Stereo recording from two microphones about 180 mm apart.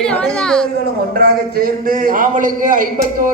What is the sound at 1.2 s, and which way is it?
A man's voice, 55° right (ahead or behind).